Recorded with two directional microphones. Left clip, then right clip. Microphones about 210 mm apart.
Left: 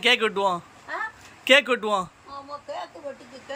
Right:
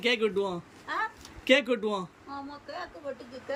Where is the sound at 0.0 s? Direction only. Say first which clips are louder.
Left 6 dB; 5° right (ahead or behind).